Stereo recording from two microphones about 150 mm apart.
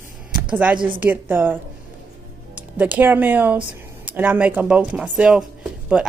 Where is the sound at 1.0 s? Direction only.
10° right (ahead or behind).